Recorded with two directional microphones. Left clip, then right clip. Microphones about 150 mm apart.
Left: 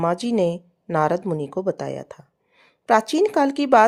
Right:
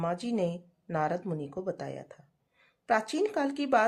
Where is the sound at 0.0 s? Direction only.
50° left (ahead or behind).